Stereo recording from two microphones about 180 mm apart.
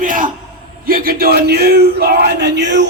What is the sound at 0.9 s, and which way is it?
Speech, 55° right (ahead or behind).